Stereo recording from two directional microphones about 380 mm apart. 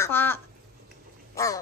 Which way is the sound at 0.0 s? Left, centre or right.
Centre.